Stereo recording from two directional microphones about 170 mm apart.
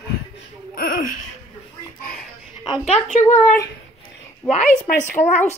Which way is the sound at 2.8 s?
40° left (ahead or behind).